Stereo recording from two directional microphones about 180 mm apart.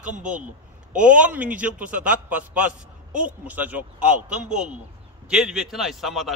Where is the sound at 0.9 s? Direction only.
5° right (ahead or behind).